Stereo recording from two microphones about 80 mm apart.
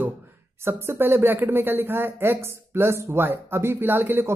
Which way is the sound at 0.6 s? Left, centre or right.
Right.